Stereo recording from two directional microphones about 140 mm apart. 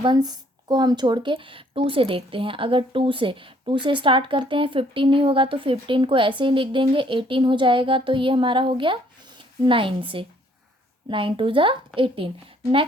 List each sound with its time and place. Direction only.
0.0 s speech: 30° right (ahead or behind)